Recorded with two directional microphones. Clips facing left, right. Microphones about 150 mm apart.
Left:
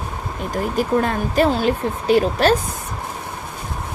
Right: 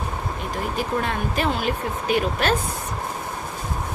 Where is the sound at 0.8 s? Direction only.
40° left (ahead or behind).